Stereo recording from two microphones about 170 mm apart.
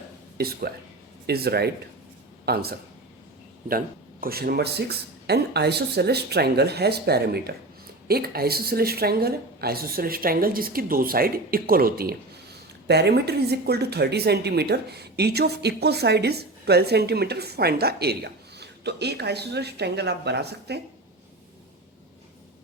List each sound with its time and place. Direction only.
0.3 s a woman's voice: 65° right (ahead or behind)
12.9 s speech: 75° right (ahead or behind)